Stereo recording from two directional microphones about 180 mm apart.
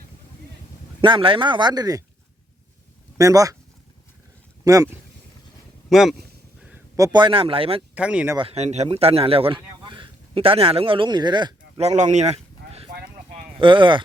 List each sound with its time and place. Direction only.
1.0 s speech: 30° right (ahead or behind)
3.2 s speech: 20° right (ahead or behind)
4.6 s speech: 20° right (ahead or behind)
5.9 s speech: centre (ahead or behind)
6.6 s a sound: 5° right (ahead or behind)
6.9 s speech: 20° right (ahead or behind)
7.9 s speech: 5° right (ahead or behind)
8.4 s speech: 35° right (ahead or behind)
11.8 s speech: 40° right (ahead or behind)
13.6 s speech: 25° right (ahead or behind)